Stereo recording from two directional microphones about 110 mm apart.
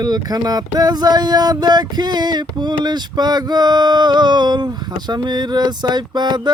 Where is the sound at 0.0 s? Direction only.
35° right (ahead or behind).